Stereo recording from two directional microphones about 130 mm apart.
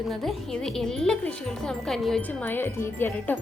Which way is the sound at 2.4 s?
15° left (ahead or behind).